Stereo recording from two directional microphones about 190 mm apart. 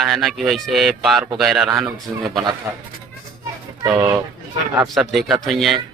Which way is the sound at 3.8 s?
10° right (ahead or behind).